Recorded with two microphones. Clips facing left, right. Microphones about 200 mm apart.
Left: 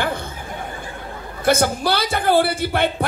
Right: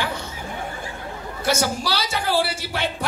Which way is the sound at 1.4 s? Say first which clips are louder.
Left 5 dB; 55° left (ahead or behind).